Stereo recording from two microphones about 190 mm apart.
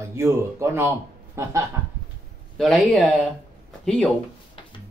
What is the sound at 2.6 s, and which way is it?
Speech, centre (ahead or behind).